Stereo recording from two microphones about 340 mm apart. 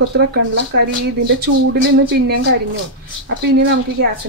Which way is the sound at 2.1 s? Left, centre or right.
Right.